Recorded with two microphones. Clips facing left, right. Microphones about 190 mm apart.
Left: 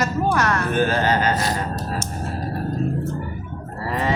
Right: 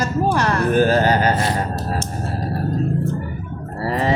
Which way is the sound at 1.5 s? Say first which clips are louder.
Right 3 dB; 45° right (ahead or behind).